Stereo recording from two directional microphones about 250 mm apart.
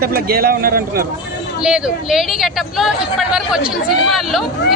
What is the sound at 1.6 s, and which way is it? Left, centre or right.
A woman's voice, centre.